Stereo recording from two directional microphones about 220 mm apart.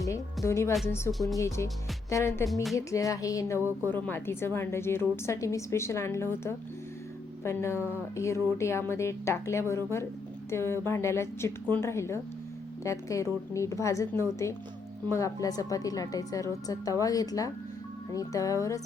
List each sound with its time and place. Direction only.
0.4 s a woman's voice: 15° left (ahead or behind)
3.6 s a woman's voice: 10° right (ahead or behind)
3.8 s a woman's voice: 10° left (ahead or behind)